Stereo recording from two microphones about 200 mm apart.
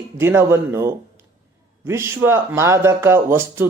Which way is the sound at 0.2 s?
10° right (ahead or behind).